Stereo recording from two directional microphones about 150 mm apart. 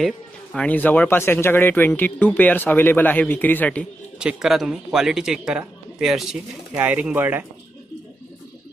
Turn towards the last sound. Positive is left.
turn(degrees=-10)  # may be behind; listen again after turning